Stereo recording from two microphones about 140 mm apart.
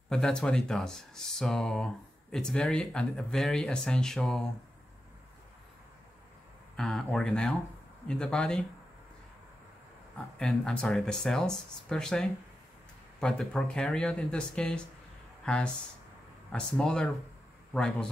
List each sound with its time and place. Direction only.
0.1 s speech: 5° left (ahead or behind)
6.8 s speech: 5° left (ahead or behind)
10.1 s a man's voice: 5° left (ahead or behind)